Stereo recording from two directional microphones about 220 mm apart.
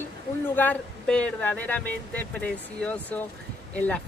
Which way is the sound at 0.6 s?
5° left (ahead or behind).